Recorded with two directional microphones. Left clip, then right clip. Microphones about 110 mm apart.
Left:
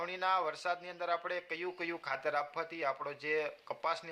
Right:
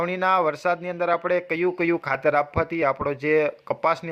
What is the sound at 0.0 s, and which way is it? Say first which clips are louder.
Speech: right 12 dB; 50° right (ahead or behind).